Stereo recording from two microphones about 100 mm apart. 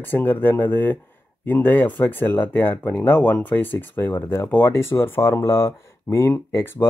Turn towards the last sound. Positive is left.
turn(degrees=25)  # may be behind; listen again after turning